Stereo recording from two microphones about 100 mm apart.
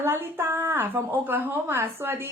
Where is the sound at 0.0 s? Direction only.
20° right (ahead or behind).